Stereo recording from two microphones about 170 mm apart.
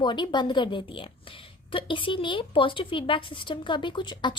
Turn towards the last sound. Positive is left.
turn(degrees=25)  # may be behind; listen again after turning